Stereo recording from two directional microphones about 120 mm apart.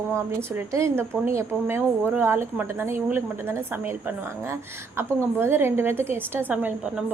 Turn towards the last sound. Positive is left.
turn(degrees=-15)  # may be behind; listen again after turning